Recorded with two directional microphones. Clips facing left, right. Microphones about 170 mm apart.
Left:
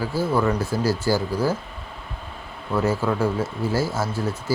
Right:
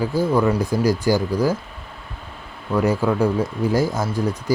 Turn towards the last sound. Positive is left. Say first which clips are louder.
# right 3 dB
turn(degrees=-15)  # may be behind; listen again after turning